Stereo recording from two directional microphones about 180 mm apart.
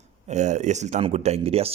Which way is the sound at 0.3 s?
40° right (ahead or behind).